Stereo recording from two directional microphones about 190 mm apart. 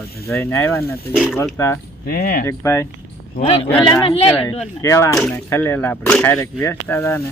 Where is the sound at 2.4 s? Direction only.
15° left (ahead or behind).